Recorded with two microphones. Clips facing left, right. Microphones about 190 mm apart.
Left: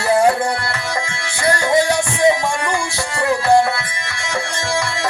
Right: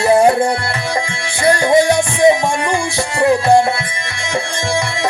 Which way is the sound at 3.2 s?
20° right (ahead or behind).